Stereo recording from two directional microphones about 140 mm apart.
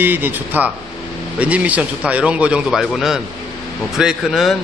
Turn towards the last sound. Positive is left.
turn(degrees=0)  # may be behind; listen again after turning